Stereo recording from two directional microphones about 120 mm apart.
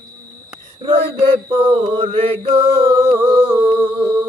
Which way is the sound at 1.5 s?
45° right (ahead or behind).